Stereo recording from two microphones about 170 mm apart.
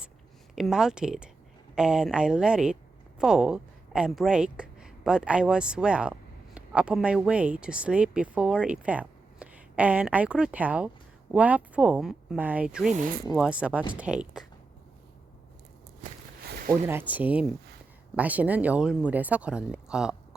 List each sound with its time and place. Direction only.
0.5 s a woman's voice: centre (ahead or behind)
16.5 s a sound: 60° right (ahead or behind)
16.8 s speech: 10° right (ahead or behind)